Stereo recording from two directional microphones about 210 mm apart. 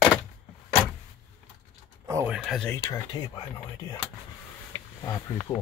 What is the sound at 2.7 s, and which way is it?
Speech, 10° left (ahead or behind).